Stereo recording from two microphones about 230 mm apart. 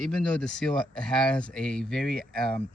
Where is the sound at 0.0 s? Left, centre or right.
Centre.